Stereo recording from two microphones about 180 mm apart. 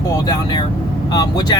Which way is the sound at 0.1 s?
20° left (ahead or behind).